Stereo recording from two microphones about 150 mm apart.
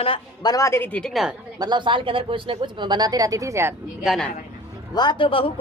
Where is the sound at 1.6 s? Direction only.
30° right (ahead or behind).